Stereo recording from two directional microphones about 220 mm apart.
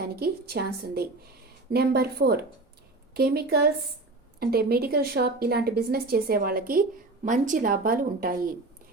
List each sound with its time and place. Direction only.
0.0 s a woman's voice: 45° right (ahead or behind)